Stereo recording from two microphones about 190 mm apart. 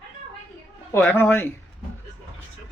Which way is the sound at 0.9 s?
10° left (ahead or behind).